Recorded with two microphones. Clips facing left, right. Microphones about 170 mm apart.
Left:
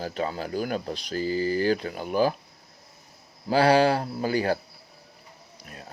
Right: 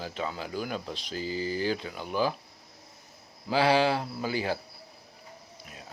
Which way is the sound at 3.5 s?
45° left (ahead or behind).